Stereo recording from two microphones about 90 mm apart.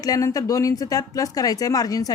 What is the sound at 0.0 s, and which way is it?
A woman's voice, 40° left (ahead or behind).